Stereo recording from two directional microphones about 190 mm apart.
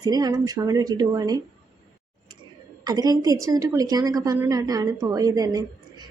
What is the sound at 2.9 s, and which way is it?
A woman's voice, 20° right (ahead or behind).